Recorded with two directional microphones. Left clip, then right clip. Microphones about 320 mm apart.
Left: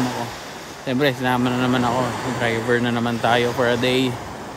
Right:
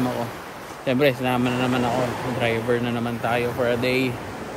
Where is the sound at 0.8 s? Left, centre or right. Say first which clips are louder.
Even; centre.